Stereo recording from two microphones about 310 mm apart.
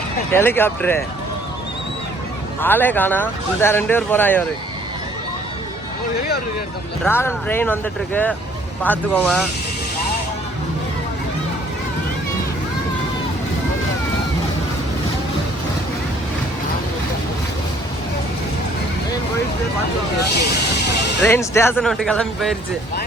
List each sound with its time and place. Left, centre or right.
0.3 s speech: centre
2.6 s speech: centre
7.0 s speech: centre
20.1 s speech: left
21.2 s speech: centre